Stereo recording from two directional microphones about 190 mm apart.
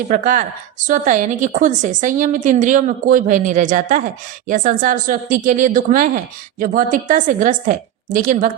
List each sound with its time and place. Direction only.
0.1 s a woman's voice: 45° right (ahead or behind)